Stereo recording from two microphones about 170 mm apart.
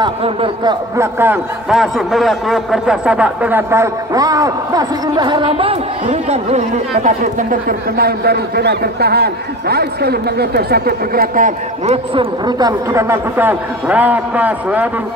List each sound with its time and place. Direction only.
0.0 s a man's voice: 30° right (ahead or behind)
0.9 s a man's voice: 15° right (ahead or behind)
1.7 s a man's voice: centre (ahead or behind)